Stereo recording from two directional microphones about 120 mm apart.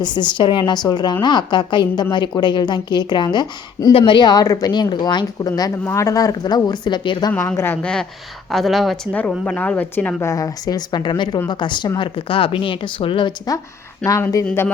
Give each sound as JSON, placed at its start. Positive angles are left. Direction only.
{"t": 0.0, "sound": "a woman's voice", "side_deg": 40}
{"t": 3.9, "sound": "a woman's voice", "side_deg": 40}
{"t": 7.8, "sound": "speech", "side_deg": 10}
{"t": 9.4, "sound": "speech", "side_deg": 10}
{"t": 10.2, "sound": "a woman's voice", "side_deg": 30}